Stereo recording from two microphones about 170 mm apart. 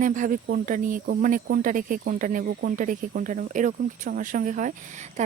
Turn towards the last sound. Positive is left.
turn(degrees=-45)  # may be behind; listen again after turning